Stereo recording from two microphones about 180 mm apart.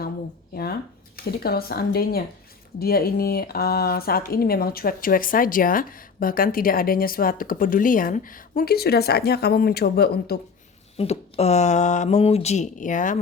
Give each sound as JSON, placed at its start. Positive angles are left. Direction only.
{"t": 0.5, "sound": "speech", "side_deg": 60}
{"t": 10.9, "sound": "speech", "side_deg": 35}